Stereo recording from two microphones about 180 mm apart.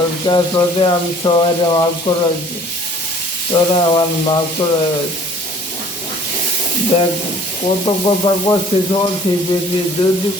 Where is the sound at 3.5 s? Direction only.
25° left (ahead or behind).